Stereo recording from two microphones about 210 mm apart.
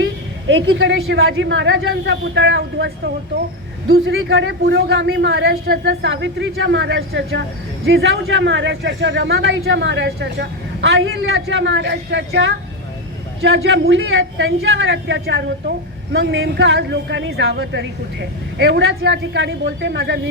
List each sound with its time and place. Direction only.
0.4 s a man's voice: 60° right (ahead or behind)
3.8 s a man's voice: 70° right (ahead or behind); by 5.9 s 45° right (ahead or behind)
5.9 s a man's voice: 60° right (ahead or behind)
16.1 s a man's voice: 65° right (ahead or behind)